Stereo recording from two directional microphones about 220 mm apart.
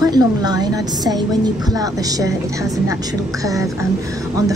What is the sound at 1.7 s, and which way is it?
Speech, 15° right (ahead or behind).